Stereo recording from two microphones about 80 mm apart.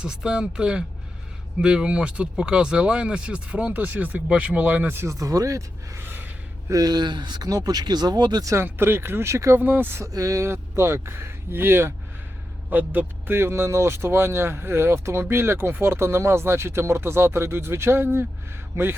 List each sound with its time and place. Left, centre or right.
0.0 s speech: centre
5.0 s speech: right
6.1 s gasp: right
6.7 s speech: right
8.6 s speech: right
9.6 s speech: right
10.0 s speech: right